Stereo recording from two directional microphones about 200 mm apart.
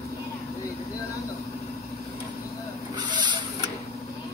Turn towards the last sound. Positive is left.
turn(degrees=-20)  # may be behind; listen again after turning